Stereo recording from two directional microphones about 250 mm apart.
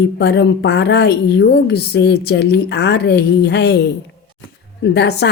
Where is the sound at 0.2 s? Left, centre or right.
Left.